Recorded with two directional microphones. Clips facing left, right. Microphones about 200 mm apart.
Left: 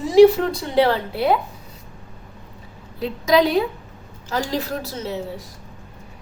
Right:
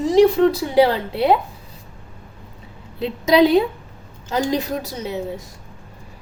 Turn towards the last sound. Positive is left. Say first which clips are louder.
# right 1 dB
turn(degrees=-15)  # may be behind; listen again after turning